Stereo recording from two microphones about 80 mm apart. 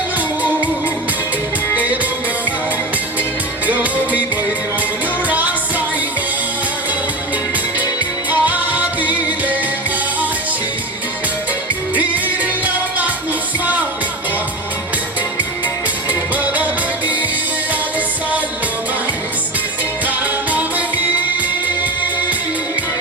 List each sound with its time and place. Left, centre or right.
1.7 s music: centre
5.3 s music: centre
8.3 s music: right
16.3 s music: right
20.1 s music: centre